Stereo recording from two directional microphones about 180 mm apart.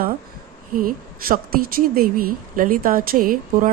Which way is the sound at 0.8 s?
50° right (ahead or behind).